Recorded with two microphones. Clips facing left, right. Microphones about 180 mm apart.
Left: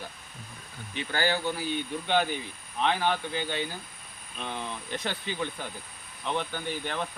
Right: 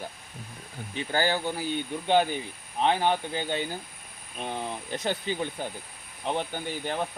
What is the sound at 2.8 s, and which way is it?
Speech, 40° right (ahead or behind).